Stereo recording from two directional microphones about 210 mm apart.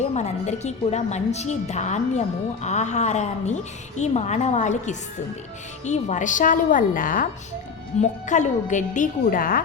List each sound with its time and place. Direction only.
0.0 s a woman's voice: 30° left (ahead or behind)